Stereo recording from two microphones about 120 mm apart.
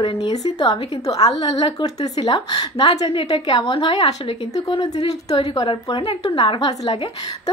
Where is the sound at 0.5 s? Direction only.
35° left (ahead or behind).